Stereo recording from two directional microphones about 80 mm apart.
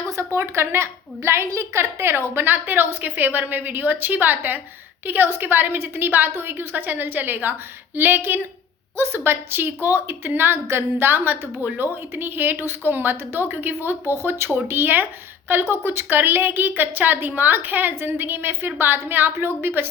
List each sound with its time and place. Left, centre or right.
0.1 s a woman's voice: right